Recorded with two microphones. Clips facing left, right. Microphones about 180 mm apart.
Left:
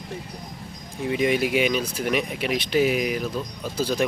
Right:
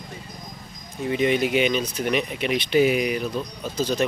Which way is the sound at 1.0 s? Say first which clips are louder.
Right 1 dB; 5° left (ahead or behind).